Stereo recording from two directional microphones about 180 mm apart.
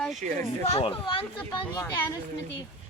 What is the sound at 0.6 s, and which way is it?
Speech, 30° left (ahead or behind).